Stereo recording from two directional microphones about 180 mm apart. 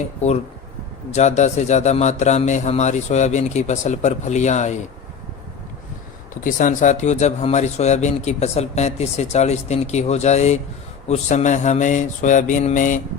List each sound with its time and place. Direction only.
1.1 s speech: 40° left (ahead or behind)
6.4 s speech: 45° left (ahead or behind)
11.1 s mantra: 40° left (ahead or behind)